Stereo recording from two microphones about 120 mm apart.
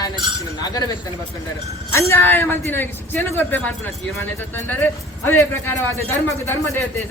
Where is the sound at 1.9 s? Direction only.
20° left (ahead or behind).